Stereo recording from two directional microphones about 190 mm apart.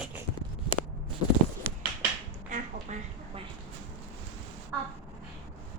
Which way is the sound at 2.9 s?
40° right (ahead or behind).